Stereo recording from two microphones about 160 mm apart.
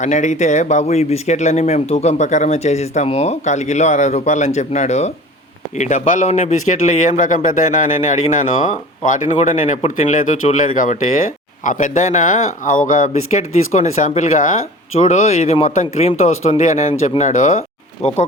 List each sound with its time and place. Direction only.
0.0 s speech: 50° left (ahead or behind)